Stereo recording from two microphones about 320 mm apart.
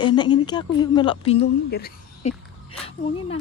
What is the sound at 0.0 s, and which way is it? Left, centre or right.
Speech, centre.